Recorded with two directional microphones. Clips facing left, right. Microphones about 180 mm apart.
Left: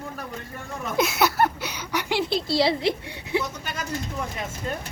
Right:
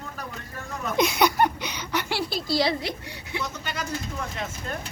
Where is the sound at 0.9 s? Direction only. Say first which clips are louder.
Right 1 dB; 5° left (ahead or behind); by 2.9 s 25° left (ahead or behind).